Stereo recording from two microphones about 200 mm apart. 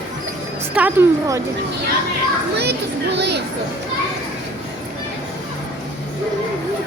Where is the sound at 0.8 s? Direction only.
10° right (ahead or behind).